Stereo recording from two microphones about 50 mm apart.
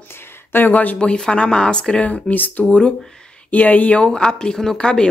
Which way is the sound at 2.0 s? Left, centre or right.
Left.